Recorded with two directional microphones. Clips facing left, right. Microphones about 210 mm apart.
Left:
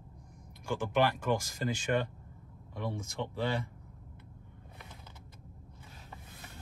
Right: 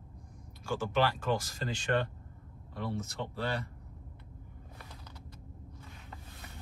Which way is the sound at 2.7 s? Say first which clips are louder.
Right 1 dB; 15° left (ahead or behind).